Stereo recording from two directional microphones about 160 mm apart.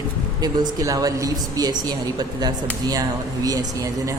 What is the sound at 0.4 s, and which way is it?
Speech, 25° right (ahead or behind).